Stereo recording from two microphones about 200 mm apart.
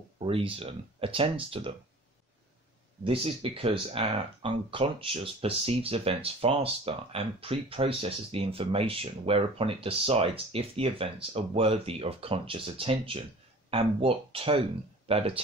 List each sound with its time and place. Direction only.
0.2 s speech: 25° right (ahead or behind)
3.0 s speech: 25° right (ahead or behind)